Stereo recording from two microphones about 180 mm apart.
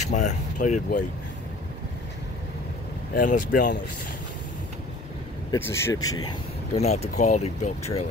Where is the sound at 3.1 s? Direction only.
45° left (ahead or behind).